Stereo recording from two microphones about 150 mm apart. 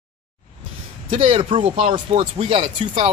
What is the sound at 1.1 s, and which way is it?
Speech, 40° right (ahead or behind).